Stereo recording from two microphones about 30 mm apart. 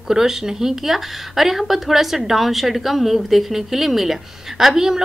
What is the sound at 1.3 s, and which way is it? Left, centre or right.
A woman's voice, centre.